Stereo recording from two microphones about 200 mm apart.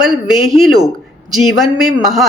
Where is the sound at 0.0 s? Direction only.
Centre (ahead or behind).